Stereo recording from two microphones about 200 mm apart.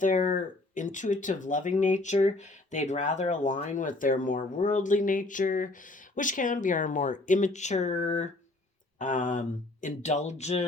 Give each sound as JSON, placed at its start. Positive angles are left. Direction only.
{"t": 0.0, "sound": "speech", "side_deg": 40}